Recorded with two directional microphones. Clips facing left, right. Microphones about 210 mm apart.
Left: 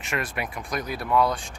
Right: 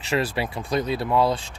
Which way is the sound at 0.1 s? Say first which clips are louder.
Right 6 dB; 30° right (ahead or behind).